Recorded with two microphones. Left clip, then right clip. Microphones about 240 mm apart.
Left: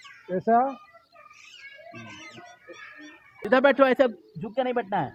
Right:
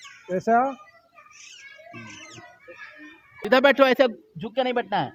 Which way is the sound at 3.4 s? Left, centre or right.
Right.